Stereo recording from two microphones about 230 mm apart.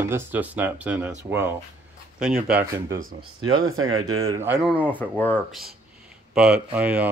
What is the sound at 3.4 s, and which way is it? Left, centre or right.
Speech, right.